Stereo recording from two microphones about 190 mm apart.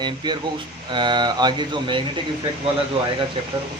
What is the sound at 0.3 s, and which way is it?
Speech, 25° right (ahead or behind).